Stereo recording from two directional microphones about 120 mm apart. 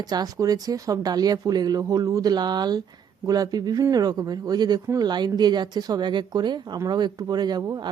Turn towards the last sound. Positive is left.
turn(degrees=-30)  # may be behind; listen again after turning